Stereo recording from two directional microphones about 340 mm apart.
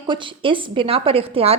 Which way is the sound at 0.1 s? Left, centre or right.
Centre.